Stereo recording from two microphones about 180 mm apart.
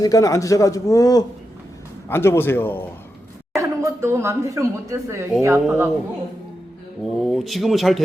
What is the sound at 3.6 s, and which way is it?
Speech, 15° right (ahead or behind).